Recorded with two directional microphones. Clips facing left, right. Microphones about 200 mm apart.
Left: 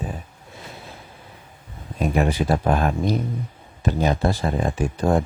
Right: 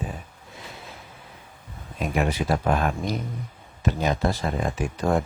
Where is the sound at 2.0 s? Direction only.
35° left (ahead or behind).